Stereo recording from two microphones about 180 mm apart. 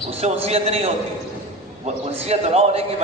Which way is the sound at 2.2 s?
35° right (ahead or behind).